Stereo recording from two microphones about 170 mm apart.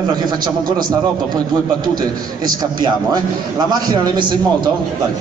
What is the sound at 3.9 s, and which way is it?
Speech, 25° right (ahead or behind).